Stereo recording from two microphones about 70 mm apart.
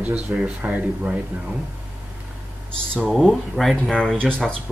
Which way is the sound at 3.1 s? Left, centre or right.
Centre.